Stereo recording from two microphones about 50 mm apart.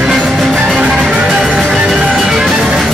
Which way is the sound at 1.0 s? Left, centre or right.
Right.